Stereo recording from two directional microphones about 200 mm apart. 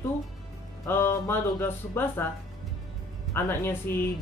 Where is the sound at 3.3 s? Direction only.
15° left (ahead or behind).